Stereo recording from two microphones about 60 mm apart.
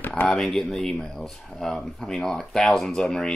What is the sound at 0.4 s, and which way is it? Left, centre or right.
Speech, centre.